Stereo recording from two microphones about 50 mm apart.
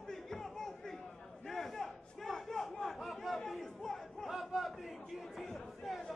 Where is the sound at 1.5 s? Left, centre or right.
Centre.